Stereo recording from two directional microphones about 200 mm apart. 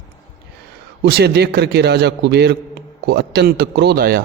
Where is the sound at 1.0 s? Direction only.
55° right (ahead or behind).